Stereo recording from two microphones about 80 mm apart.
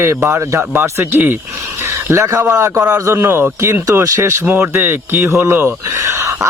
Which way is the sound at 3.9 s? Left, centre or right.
Right.